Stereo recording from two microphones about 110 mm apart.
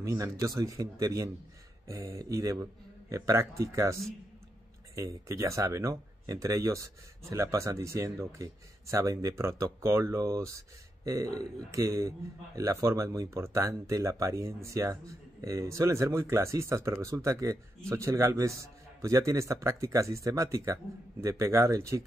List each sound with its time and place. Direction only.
0.0 s speech: 30° right (ahead or behind)